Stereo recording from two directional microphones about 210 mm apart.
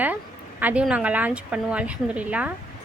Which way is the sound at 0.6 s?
5° right (ahead or behind).